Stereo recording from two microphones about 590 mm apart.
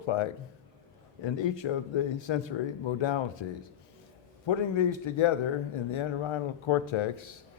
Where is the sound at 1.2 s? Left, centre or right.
Left.